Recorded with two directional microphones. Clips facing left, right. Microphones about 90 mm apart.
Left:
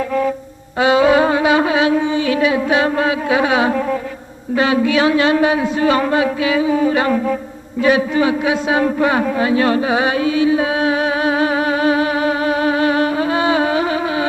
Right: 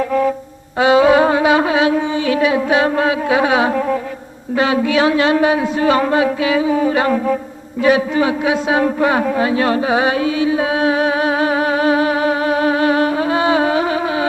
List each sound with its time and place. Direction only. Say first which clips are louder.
0.8 s music: right 1 dB; 35° right (ahead or behind)
4.5 s speech: even; 35° right (ahead or behind)
10.6 s music: right 1 dB; 40° right (ahead or behind)